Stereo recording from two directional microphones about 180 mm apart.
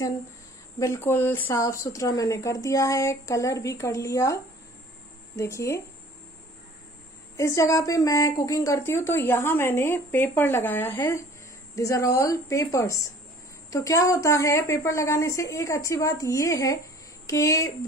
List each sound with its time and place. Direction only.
0.7 s a woman's voice: 15° left (ahead or behind)
7.3 s a woman's voice: 15° left (ahead or behind)